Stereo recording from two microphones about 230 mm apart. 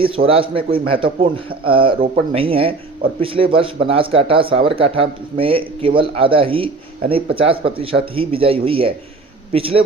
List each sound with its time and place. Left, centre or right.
0.3 s speech: right